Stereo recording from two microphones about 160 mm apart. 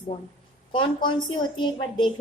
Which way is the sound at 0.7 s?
30° left (ahead or behind).